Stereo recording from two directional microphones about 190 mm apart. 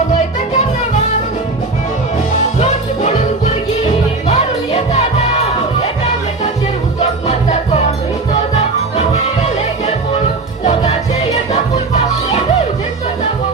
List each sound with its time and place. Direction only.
2.6 s music: 35° left (ahead or behind)
7.0 s music: 35° left (ahead or behind)
10.6 s music: 35° left (ahead or behind)